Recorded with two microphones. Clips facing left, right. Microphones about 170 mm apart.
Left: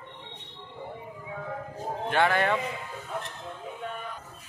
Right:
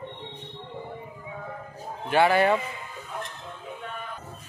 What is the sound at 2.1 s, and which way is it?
Speech, 5° right (ahead or behind).